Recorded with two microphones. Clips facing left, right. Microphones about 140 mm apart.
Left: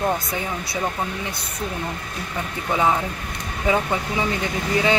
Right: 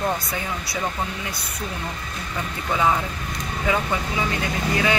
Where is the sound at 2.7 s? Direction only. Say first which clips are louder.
Left 1 dB; 20° left (ahead or behind).